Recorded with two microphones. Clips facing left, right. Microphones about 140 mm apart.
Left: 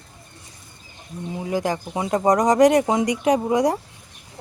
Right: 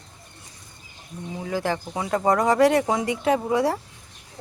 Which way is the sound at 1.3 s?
15° left (ahead or behind).